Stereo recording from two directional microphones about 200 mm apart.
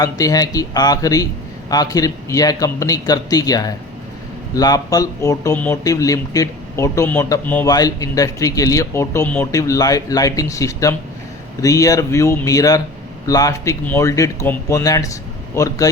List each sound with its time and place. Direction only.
0.0 s speech: 15° left (ahead or behind)